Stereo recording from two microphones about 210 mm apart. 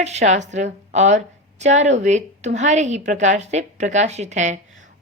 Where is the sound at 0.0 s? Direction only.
30° right (ahead or behind).